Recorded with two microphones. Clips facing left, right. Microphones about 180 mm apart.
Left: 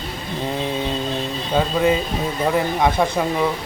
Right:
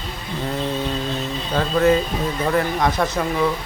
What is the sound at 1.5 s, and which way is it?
Speech, 15° left (ahead or behind).